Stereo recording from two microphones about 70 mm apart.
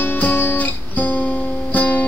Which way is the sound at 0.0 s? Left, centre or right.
Left.